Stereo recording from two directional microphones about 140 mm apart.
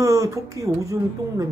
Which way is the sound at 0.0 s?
25° right (ahead or behind).